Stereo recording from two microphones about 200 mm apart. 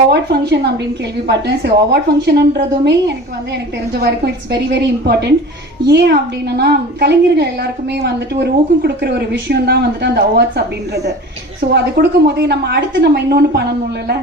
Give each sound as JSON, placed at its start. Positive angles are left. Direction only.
{"t": 0.1, "sound": "a woman's voice", "side_deg": -55}
{"t": 4.7, "sound": "a woman's voice", "side_deg": -60}
{"t": 11.7, "sound": "a woman's voice", "side_deg": -55}